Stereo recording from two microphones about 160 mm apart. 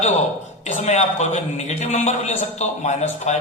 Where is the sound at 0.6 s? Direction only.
45° left (ahead or behind).